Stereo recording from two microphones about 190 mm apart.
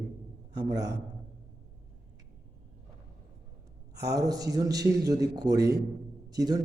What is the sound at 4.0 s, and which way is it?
A man's voice, 20° right (ahead or behind).